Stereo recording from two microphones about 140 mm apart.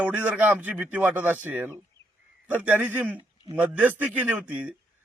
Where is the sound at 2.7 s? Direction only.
10° right (ahead or behind).